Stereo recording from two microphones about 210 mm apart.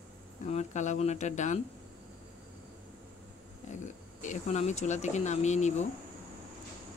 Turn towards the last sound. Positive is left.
turn(degrees=35)  # may be behind; listen again after turning